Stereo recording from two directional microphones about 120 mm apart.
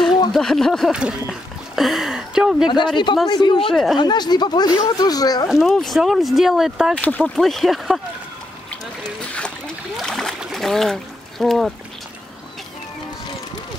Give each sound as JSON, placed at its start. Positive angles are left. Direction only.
{"t": 0.3, "sound": "speech", "side_deg": 5}
{"t": 2.6, "sound": "speech", "side_deg": 40}
{"t": 3.6, "sound": "speech", "side_deg": 0}
{"t": 4.0, "sound": "speech", "side_deg": 35}
{"t": 5.5, "sound": "speech", "side_deg": 0}
{"t": 7.0, "sound": "speech", "side_deg": 10}
{"t": 9.2, "sound": "splash", "side_deg": 10}
{"t": 9.9, "sound": "a sound", "side_deg": 0}
{"t": 10.4, "sound": "speech", "side_deg": 0}